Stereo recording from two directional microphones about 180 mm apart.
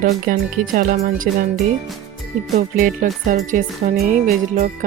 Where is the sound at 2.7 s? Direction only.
50° right (ahead or behind).